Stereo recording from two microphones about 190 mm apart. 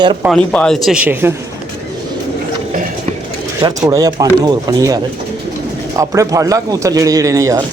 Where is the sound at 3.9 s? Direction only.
20° right (ahead or behind).